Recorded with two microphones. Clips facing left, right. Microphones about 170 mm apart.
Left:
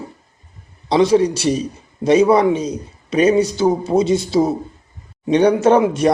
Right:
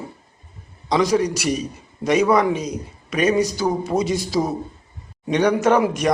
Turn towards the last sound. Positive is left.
turn(degrees=30)  # may be behind; listen again after turning